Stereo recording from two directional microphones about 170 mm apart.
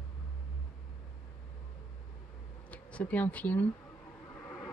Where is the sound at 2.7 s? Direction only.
10° left (ahead or behind).